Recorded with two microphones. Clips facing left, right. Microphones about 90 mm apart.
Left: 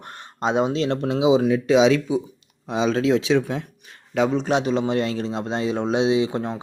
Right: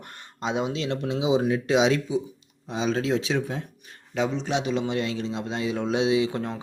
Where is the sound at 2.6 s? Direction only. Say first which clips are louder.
Left 5 dB; 85° left.